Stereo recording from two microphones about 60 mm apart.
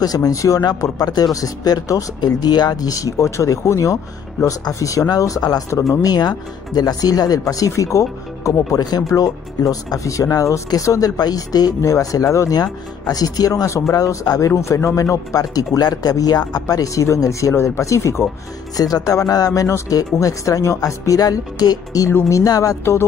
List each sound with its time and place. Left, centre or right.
0.0 s speech: left
6.8 s speech: left
8.7 s speech: left
13.7 s speech: left
14.6 s a man's voice: left
15.3 s speech: left
18.8 s speech: left
22.3 s speech: left